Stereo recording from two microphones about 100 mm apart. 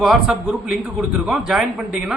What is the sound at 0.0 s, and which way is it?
A man's voice, 5° right (ahead or behind).